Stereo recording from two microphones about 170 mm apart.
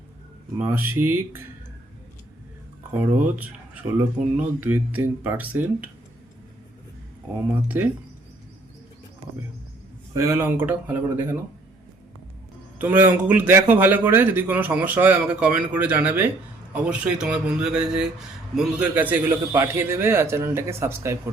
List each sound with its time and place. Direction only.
0.6 s a man's voice: 15° right (ahead or behind)
3.9 s a man's voice: 10° right (ahead or behind)
7.7 s a man's voice: 10° right (ahead or behind)
10.2 s a man's voice: 15° right (ahead or behind)
12.8 s a man's voice: 10° right (ahead or behind)